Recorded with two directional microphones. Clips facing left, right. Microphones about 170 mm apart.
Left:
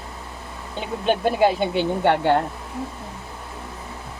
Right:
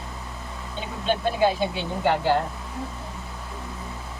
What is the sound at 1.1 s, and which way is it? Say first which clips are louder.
Speech: left 3 dB; 60° left (ahead or behind).